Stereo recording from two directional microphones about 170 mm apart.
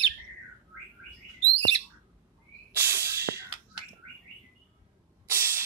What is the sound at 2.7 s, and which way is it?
Hiss, 15° right (ahead or behind).